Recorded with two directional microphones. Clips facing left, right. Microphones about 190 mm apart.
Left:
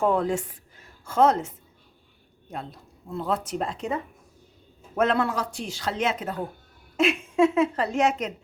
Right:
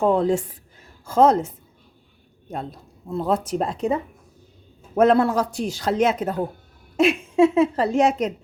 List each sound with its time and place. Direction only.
0.0 s a woman's voice: 25° right (ahead or behind)
3.1 s a man's voice: 40° right (ahead or behind)
4.9 s a man's voice: 35° right (ahead or behind)
7.0 s a man's voice: 30° right (ahead or behind)